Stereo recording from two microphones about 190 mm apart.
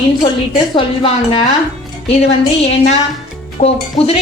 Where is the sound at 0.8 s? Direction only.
25° left (ahead or behind).